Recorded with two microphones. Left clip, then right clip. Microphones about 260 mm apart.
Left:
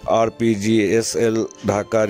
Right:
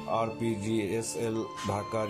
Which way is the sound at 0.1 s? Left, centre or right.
Left.